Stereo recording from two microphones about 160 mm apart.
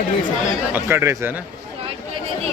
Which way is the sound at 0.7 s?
15° right (ahead or behind).